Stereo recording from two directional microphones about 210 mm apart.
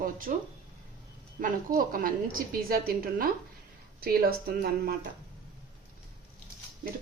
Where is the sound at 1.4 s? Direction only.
40° right (ahead or behind).